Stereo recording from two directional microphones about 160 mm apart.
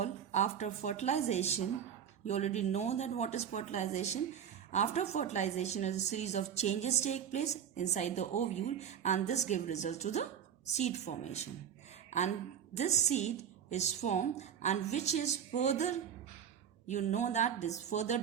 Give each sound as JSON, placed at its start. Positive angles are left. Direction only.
{"t": 0.0, "sound": "a woman's voice", "side_deg": 45}